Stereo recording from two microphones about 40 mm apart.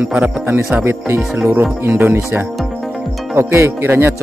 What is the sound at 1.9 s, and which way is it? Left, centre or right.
Speech, right.